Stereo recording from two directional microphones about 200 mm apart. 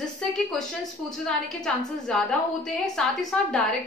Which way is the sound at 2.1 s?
5° left (ahead or behind).